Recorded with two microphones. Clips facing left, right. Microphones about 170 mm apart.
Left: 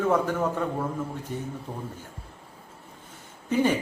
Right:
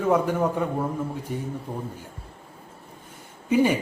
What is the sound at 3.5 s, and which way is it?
Speech, 10° right (ahead or behind).